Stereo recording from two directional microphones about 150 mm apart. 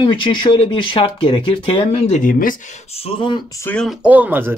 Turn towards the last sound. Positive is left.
turn(degrees=-15)  # may be behind; listen again after turning